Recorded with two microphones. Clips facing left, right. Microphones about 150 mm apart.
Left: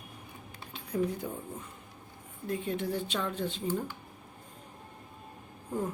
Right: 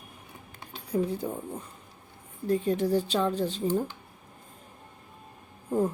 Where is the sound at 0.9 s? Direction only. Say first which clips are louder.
Right 3 dB; 30° right (ahead or behind).